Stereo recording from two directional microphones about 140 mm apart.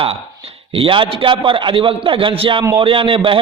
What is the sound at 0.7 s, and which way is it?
A man's voice, 40° right (ahead or behind).